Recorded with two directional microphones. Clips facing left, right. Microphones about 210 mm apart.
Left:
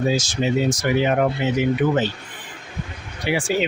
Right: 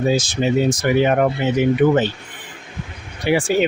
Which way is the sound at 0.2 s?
55° right (ahead or behind).